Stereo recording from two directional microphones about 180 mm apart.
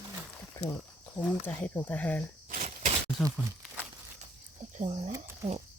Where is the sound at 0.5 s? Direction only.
15° left (ahead or behind).